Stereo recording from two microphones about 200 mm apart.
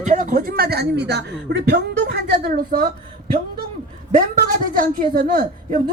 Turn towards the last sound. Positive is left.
turn(degrees=-45)  # may be behind; listen again after turning